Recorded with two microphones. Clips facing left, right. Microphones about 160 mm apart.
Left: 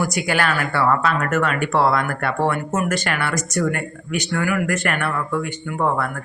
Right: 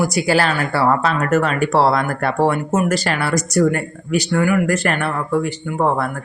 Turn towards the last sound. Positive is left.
turn(degrees=-35)  # may be behind; listen again after turning